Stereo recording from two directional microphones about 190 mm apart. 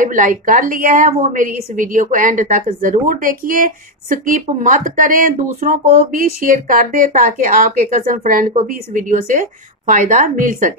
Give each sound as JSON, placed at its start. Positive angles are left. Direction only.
{"t": 0.0, "sound": "a woman's voice", "side_deg": -45}